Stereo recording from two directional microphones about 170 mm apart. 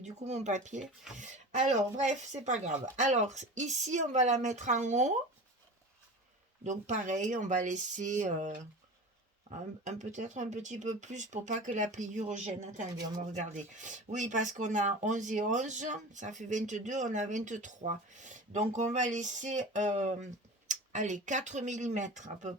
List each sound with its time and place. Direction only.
0.0 s speech: 40° right (ahead or behind)
6.7 s speech: 45° right (ahead or behind)